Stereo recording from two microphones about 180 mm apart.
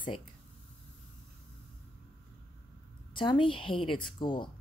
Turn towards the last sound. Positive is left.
turn(degrees=25)  # may be behind; listen again after turning